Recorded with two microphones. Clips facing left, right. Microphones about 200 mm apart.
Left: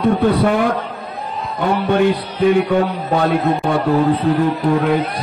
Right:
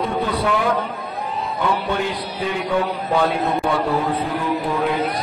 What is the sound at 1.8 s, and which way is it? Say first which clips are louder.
A man's voice: left 8 dB; 60° left (ahead or behind).